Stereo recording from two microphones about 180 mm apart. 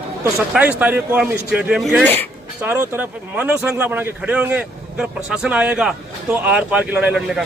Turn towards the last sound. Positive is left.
turn(degrees=-5)  # may be behind; listen again after turning